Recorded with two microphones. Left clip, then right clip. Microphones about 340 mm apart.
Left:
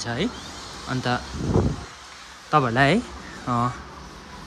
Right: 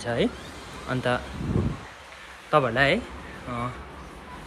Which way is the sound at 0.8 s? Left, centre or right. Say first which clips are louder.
Even; centre.